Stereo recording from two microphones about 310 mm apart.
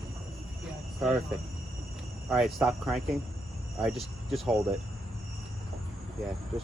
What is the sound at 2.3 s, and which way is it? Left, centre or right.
Speech, centre.